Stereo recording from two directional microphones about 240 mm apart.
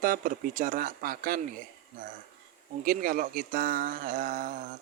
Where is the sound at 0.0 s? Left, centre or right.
Right.